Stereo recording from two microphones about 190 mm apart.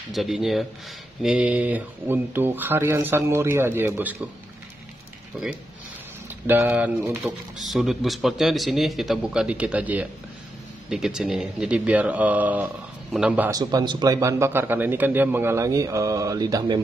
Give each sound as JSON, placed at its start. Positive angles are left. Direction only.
{"t": 0.1, "sound": "a man's voice", "side_deg": 0}
{"t": 5.3, "sound": "a man's voice", "side_deg": -5}
{"t": 13.5, "sound": "a man's voice", "side_deg": -20}